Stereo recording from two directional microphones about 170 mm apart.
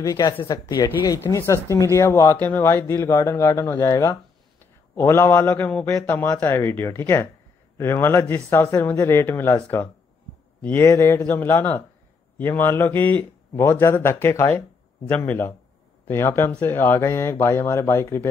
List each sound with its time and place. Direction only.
0.0 s speech: 20° left (ahead or behind)